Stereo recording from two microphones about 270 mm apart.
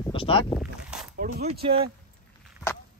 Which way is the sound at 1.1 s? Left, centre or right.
Right.